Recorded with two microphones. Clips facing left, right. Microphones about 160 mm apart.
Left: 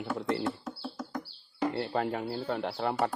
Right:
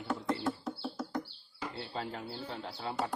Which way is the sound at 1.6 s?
65° left (ahead or behind).